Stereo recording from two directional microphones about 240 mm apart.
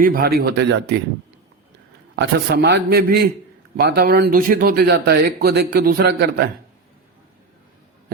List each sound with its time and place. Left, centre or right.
0.0 s speech: right
2.1 s speech: right